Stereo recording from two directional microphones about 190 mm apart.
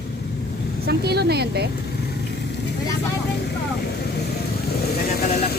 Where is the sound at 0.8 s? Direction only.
60° right (ahead or behind).